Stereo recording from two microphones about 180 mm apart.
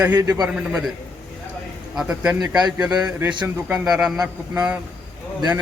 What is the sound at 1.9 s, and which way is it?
Speech, 5° right (ahead or behind).